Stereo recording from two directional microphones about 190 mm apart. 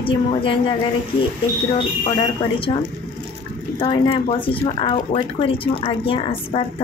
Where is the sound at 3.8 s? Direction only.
30° left (ahead or behind).